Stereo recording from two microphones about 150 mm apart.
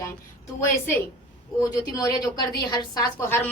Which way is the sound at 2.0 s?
25° left (ahead or behind).